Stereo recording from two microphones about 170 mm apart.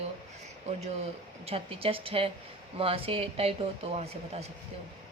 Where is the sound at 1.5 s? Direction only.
35° right (ahead or behind).